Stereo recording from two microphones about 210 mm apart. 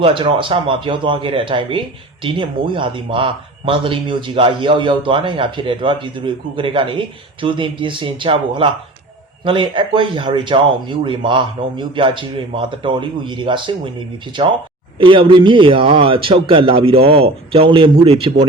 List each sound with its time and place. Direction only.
0.0 s speech: 25° right (ahead or behind)
14.9 s speech: 25° right (ahead or behind)